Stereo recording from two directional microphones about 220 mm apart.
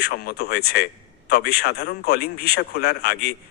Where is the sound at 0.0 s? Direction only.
45° left (ahead or behind).